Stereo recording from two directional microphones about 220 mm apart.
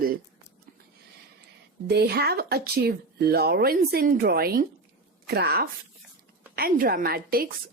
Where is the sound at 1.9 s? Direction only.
45° right (ahead or behind).